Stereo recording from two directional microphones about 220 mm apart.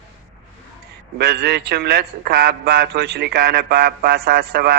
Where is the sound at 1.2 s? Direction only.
45° right (ahead or behind).